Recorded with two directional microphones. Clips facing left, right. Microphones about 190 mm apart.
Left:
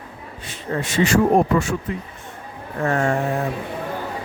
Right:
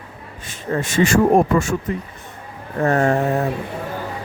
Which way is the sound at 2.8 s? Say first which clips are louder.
Right 4 dB; 35° right (ahead or behind).